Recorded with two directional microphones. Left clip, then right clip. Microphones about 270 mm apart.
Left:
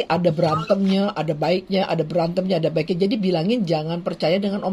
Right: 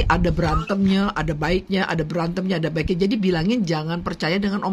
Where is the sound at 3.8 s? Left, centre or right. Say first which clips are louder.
Left 3 dB; right.